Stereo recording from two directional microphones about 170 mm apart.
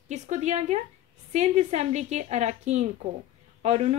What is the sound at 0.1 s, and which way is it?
Speech, 45° right (ahead or behind).